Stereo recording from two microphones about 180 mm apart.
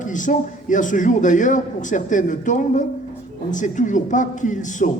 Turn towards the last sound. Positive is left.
turn(degrees=45)  # may be behind; listen again after turning